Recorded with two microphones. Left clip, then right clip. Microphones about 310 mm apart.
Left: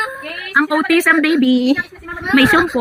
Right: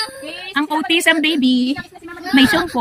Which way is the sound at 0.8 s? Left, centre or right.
Centre.